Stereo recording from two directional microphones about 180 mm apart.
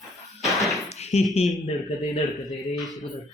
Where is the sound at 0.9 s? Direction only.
35° left (ahead or behind).